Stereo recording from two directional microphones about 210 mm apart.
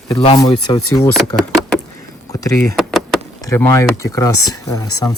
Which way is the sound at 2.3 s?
15° left (ahead or behind).